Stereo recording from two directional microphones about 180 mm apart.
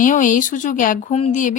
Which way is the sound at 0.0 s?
45° left (ahead or behind).